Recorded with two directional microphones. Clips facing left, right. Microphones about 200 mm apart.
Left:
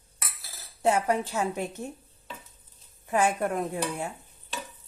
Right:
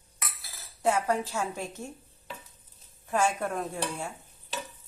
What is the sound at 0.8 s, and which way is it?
A woman's voice, 25° left (ahead or behind).